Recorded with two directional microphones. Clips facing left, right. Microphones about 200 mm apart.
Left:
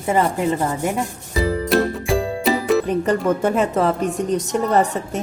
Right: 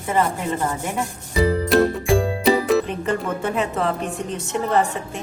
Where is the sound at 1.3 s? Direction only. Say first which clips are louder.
Right 1 dB; centre (ahead or behind).